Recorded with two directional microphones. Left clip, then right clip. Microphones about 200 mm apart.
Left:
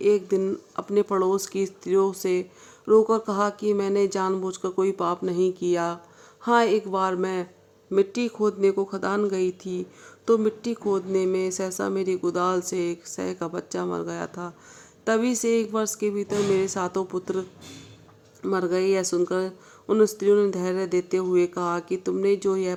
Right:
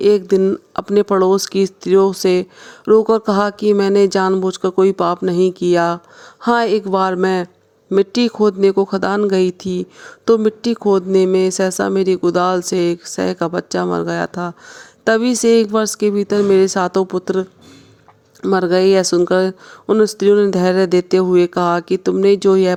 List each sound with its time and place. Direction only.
0.0 s speech: 40° right (ahead or behind)
18.4 s speech: 40° right (ahead or behind)